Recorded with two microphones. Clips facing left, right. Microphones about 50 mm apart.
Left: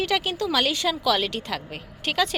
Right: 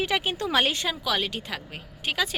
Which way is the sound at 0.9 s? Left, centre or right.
Centre.